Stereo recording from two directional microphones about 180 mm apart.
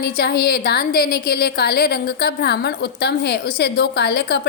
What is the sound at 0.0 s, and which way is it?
A woman's voice, 60° left (ahead or behind).